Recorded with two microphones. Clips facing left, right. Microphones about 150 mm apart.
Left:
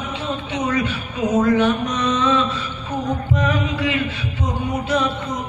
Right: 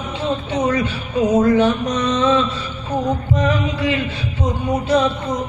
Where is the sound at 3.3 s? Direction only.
35° right (ahead or behind).